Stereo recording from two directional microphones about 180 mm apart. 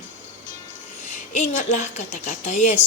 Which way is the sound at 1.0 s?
40° left (ahead or behind).